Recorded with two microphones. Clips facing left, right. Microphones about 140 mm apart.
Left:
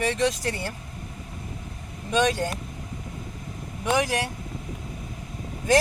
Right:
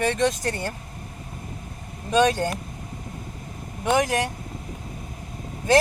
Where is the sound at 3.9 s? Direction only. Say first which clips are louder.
Right 3 dB; 40° right (ahead or behind).